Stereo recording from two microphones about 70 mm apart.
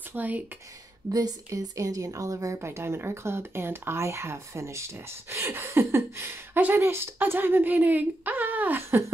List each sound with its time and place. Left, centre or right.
0.1 s speech: right
1.1 s a woman's voice: right